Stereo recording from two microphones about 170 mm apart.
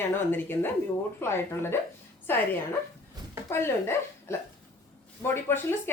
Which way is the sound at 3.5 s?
15° left (ahead or behind).